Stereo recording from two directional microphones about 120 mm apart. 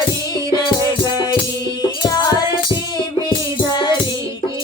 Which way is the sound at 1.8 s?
35° left (ahead or behind).